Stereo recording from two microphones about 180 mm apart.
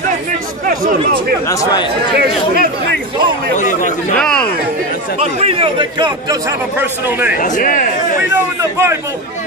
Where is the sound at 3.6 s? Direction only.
45° left (ahead or behind).